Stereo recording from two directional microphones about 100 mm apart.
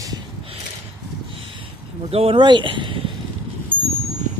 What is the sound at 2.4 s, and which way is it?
Speech, 55° right (ahead or behind).